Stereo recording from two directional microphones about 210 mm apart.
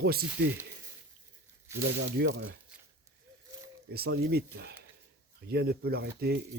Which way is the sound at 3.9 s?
50° right (ahead or behind).